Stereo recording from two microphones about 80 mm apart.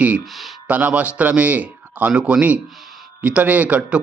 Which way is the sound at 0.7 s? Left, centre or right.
Right.